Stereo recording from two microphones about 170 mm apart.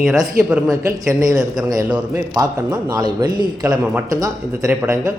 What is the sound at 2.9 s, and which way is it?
A man's voice, 25° right (ahead or behind).